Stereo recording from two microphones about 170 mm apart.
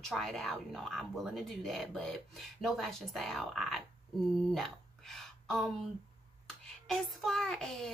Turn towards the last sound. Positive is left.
turn(degrees=0)  # may be behind; listen again after turning